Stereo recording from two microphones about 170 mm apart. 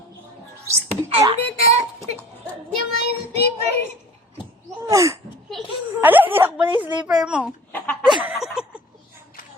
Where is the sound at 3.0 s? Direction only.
75° left (ahead or behind).